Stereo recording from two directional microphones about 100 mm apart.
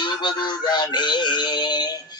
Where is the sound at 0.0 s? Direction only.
50° left (ahead or behind).